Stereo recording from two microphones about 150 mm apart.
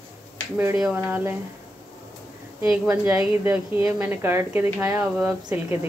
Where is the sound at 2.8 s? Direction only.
10° right (ahead or behind).